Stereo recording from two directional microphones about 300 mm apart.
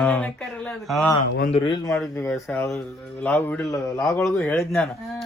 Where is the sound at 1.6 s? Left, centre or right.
Centre.